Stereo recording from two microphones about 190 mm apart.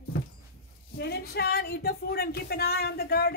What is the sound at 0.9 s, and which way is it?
Speech, 60° left (ahead or behind).